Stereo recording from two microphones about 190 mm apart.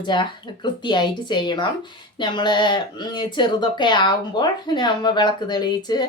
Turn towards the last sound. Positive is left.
turn(degrees=20)  # may be behind; listen again after turning